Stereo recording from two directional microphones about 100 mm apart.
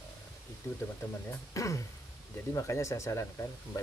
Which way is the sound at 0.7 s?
25° left (ahead or behind).